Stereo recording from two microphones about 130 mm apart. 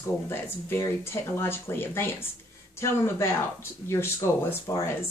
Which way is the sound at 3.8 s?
20° left (ahead or behind).